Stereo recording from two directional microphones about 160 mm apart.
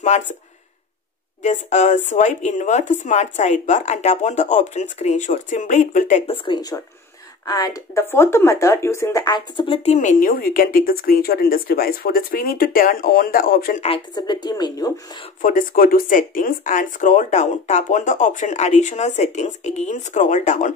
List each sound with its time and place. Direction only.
0.1 s speech: 45° left (ahead or behind)
1.4 s speech: 45° left (ahead or behind)
6.3 s speech: 30° left (ahead or behind)
9.9 s speech: 55° left (ahead or behind)
13.7 s speech: 35° left (ahead or behind)
15.4 s speech: 60° left (ahead or behind)